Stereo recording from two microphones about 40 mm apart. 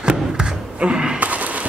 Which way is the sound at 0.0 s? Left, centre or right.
Right.